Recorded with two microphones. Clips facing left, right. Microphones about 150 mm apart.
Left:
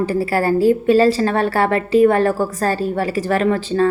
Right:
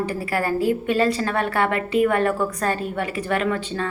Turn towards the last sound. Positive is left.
turn(degrees=35)  # may be behind; listen again after turning